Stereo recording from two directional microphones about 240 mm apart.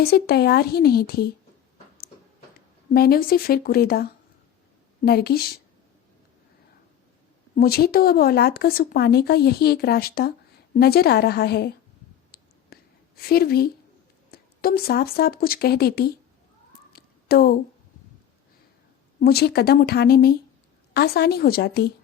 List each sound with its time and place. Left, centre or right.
0.0 s speech: left
2.9 s speech: left
7.5 s speech: left
12.3 s whispering: left
14.3 s speech: left
16.9 s a sound: left
19.2 s speech: left